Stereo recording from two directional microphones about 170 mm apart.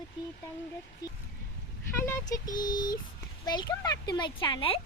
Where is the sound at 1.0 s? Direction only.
25° left (ahead or behind).